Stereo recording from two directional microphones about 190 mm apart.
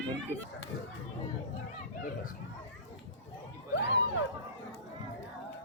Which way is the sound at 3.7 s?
65° left (ahead or behind).